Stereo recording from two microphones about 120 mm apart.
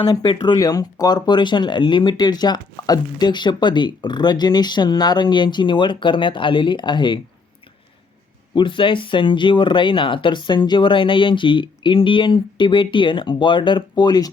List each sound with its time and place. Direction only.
0.1 s speech: 35° left (ahead or behind)
8.5 s speech: 45° left (ahead or behind)